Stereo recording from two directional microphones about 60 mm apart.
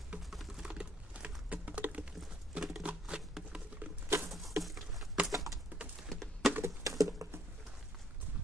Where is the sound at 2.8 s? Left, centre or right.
Centre.